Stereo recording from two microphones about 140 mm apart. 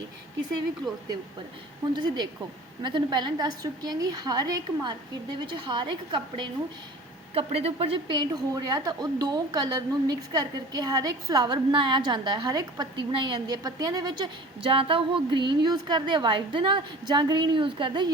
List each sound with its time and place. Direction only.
2.0 s a woman's voice: 30° right (ahead or behind)